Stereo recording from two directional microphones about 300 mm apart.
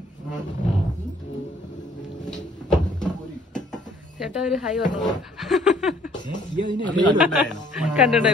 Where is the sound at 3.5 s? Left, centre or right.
Left.